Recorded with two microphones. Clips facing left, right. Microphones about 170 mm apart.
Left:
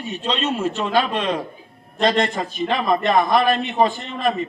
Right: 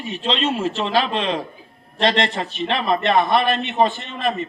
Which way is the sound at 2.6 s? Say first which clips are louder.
Left 1 dB; 15° left (ahead or behind).